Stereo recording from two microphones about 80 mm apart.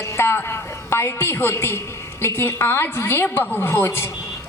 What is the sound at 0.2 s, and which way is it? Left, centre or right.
A woman's voice, left.